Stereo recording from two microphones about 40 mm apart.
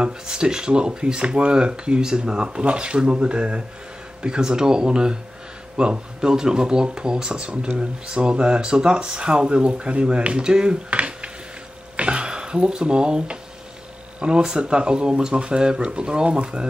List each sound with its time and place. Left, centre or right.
0.4 s speech: right
12.0 s a sound: right
14.4 s speech: right